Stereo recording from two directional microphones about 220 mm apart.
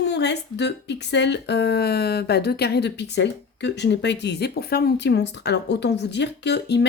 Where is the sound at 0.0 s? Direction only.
50° left (ahead or behind).